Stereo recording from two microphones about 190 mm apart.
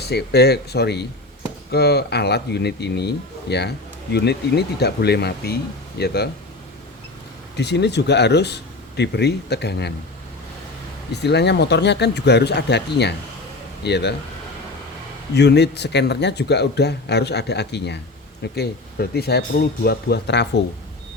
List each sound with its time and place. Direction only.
0.0 s speech: 60° left (ahead or behind)
7.5 s speech: 60° left (ahead or behind)
11.1 s speech: 60° left (ahead or behind)
15.4 s speech: 60° left (ahead or behind)